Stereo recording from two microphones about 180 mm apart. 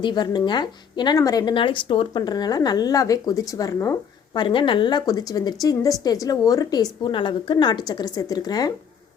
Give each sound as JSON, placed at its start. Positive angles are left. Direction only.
{"t": 0.0, "sound": "a woman's voice", "side_deg": 25}
{"t": 4.4, "sound": "a woman's voice", "side_deg": 30}